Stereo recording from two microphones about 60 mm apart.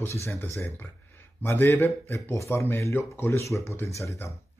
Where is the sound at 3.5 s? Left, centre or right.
Left.